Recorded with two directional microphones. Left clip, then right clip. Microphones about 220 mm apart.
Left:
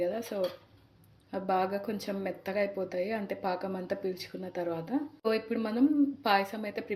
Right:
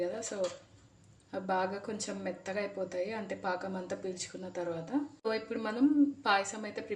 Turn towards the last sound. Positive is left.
turn(degrees=20)  # may be behind; listen again after turning